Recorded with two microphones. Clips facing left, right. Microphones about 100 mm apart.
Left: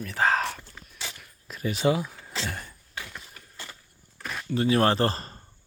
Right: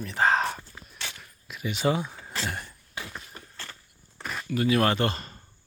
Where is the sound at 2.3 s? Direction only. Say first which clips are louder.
Right 1 dB; 5° right (ahead or behind).